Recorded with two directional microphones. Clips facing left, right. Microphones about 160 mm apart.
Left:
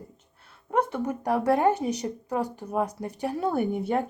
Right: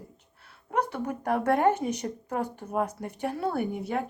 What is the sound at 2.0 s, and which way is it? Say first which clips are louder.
Speech: left 2 dB; 15° left (ahead or behind).